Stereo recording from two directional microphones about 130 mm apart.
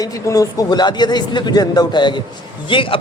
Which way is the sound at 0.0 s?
25° left (ahead or behind).